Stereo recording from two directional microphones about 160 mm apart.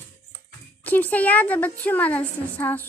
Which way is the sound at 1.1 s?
10° left (ahead or behind).